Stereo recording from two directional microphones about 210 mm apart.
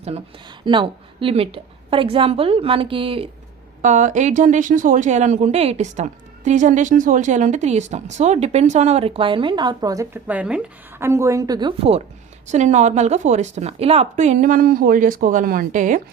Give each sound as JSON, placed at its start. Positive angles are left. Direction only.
{"t": 0.6, "sound": "speech", "side_deg": -25}
{"t": 3.8, "sound": "speech", "side_deg": -35}